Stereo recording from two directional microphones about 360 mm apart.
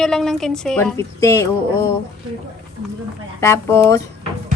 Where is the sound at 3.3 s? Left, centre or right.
Centre.